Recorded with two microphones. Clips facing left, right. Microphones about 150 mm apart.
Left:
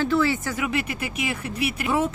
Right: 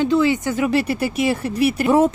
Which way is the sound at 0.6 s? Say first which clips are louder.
Right 8 dB; 35° right (ahead or behind).